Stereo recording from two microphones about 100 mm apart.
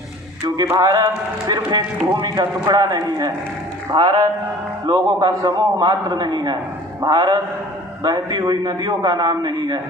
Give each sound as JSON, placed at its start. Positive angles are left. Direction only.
{"t": 0.4, "sound": "a man's voice", "side_deg": -45}